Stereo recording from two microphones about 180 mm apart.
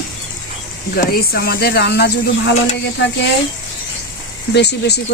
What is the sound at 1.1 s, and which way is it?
Speech, 60° left (ahead or behind).